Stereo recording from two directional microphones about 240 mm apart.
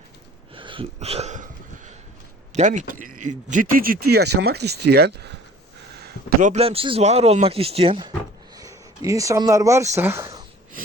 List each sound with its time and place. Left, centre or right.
0.5 s a sound: right
2.5 s a man's voice: right
6.0 s speech: right; by 10.4 s centre